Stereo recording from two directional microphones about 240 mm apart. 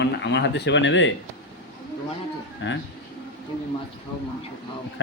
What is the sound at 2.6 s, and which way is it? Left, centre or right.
Speech, left.